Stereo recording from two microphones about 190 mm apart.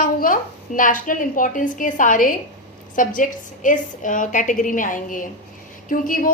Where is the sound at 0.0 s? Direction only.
45° left (ahead or behind).